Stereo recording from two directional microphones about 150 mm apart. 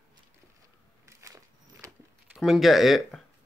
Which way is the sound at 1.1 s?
20° right (ahead or behind).